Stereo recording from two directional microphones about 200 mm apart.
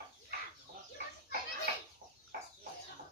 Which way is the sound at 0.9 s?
55° right (ahead or behind).